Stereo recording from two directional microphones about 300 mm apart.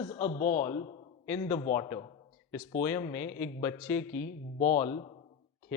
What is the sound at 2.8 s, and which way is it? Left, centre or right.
Speech, centre.